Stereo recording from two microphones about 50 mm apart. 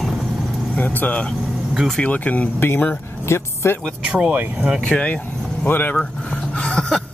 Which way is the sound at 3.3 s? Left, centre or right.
Left.